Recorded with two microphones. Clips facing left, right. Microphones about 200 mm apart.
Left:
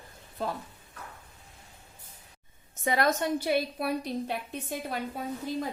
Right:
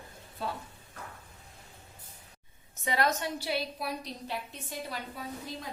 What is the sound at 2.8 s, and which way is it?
A woman's voice, 50° left (ahead or behind).